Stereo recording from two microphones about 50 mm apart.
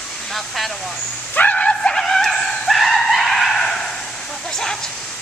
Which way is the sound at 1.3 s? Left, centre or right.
Left.